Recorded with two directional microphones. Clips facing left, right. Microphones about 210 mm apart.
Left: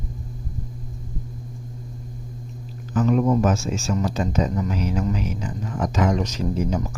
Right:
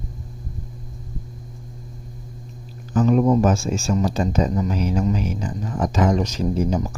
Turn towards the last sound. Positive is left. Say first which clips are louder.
# right 3 dB
turn(degrees=-30)  # may be behind; listen again after turning